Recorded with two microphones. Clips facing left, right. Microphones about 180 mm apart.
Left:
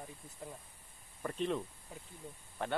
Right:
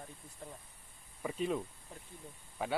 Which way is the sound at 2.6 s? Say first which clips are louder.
Right 1 dB; 5° right (ahead or behind).